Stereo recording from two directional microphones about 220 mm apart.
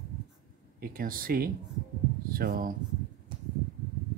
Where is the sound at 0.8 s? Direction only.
40° right (ahead or behind).